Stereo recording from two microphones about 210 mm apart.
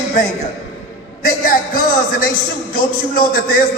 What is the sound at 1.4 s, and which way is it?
A man's voice, 40° left (ahead or behind).